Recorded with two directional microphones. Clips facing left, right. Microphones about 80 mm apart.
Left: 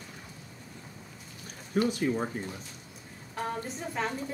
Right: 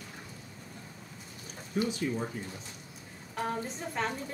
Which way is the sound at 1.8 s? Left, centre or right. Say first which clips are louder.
Left 4 dB; left.